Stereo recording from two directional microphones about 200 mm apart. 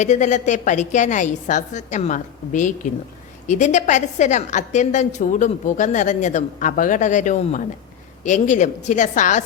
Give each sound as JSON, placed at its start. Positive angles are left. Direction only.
{"t": 0.0, "sound": "a woman's voice", "side_deg": 35}